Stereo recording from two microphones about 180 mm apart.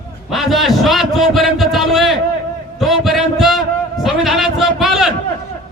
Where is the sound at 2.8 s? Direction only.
Centre (ahead or behind).